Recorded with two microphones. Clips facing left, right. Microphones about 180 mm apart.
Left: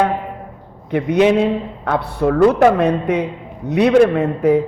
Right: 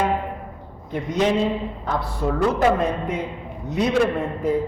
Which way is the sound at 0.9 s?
65° left (ahead or behind).